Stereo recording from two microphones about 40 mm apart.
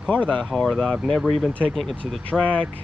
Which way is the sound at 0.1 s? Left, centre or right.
Left.